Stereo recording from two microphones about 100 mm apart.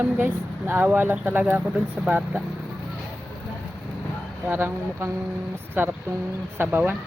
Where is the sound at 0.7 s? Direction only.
20° right (ahead or behind).